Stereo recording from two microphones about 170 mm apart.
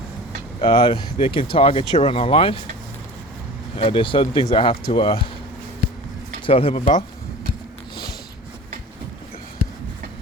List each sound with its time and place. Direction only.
0.6 s speech: 30° left (ahead or behind)
3.8 s speech: 30° left (ahead or behind)
6.4 s speech: 30° left (ahead or behind)